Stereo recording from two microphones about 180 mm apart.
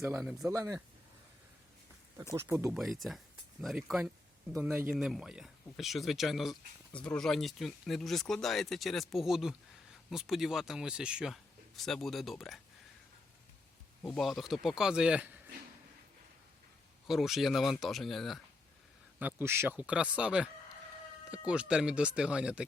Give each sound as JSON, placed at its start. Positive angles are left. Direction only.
{"t": 0.0, "sound": "speech", "side_deg": -5}
{"t": 0.5, "sound": "speech", "side_deg": -15}
{"t": 2.3, "sound": "speech", "side_deg": -15}
{"t": 2.7, "sound": "speech", "side_deg": 0}
{"t": 14.0, "sound": "speech", "side_deg": 0}
{"t": 17.1, "sound": "speech", "side_deg": 0}
{"t": 19.2, "sound": "speech", "side_deg": -10}